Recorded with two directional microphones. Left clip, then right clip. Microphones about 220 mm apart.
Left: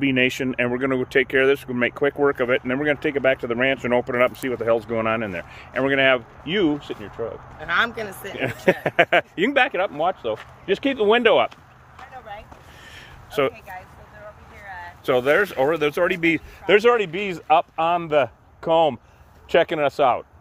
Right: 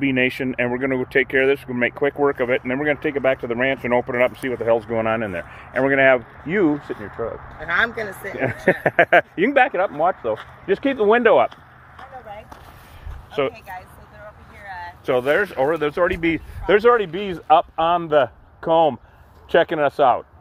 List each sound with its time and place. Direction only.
0.0 s speech: 15° left (ahead or behind); by 5.5 s centre (ahead or behind)
5.7 s speech: 15° right (ahead or behind)
8.0 s speech: centre (ahead or behind)
8.4 s speech: 15° right (ahead or behind)
13.3 s speech: 35° left (ahead or behind)
14.6 s a sound: 45° right (ahead or behind)
15.0 s speech: 20° left (ahead or behind); by 20.2 s 5° left (ahead or behind)